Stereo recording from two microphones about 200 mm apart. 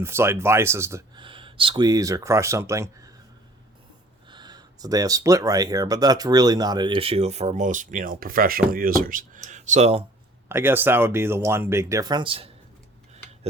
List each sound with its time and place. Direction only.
0.0 s speech: 10° right (ahead or behind)
4.3 s speech: 20° right (ahead or behind)
10.5 s speech: 10° right (ahead or behind); by 12.5 s 25° right (ahead or behind)